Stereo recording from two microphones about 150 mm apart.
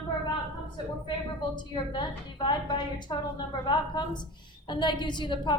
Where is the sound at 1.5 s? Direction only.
30° left (ahead or behind).